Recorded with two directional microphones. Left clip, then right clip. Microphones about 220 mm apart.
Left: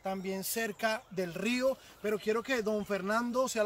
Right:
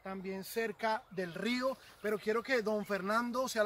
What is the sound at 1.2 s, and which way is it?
Speech, 15° left (ahead or behind).